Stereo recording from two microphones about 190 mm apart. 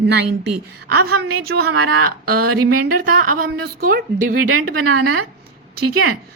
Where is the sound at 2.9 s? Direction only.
50° right (ahead or behind).